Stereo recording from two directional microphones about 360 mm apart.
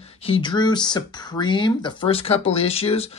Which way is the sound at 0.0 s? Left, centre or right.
Centre.